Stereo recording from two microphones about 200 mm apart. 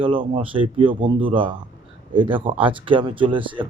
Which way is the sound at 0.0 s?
25° right (ahead or behind).